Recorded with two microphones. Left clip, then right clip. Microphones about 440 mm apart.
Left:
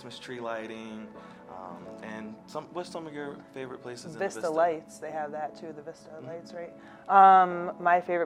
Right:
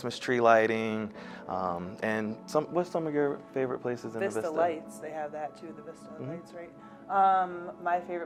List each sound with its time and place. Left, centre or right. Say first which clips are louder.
0.0 s speech: right 12 dB; right
4.2 s speech: left 2 dB; left
7.1 s speech: left 7 dB; left